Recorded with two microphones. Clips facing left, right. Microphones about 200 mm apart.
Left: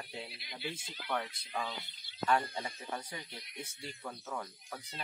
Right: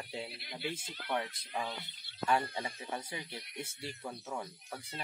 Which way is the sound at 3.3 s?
25° right (ahead or behind).